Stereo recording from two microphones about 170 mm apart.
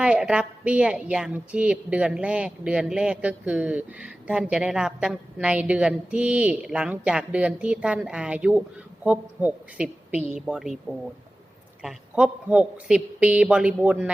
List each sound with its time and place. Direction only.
0.0 s a woman's voice: 5° right (ahead or behind)
11.8 s speech: 5° right (ahead or behind)